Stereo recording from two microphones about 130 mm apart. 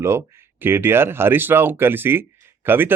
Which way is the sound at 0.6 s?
15° right (ahead or behind).